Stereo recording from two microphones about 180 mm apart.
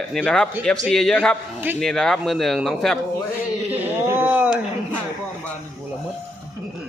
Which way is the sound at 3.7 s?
10° right (ahead or behind).